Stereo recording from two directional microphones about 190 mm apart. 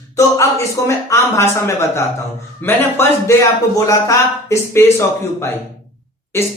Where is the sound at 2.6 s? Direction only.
10° left (ahead or behind).